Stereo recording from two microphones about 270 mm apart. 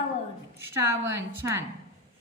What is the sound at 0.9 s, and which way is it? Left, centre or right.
Speech, centre.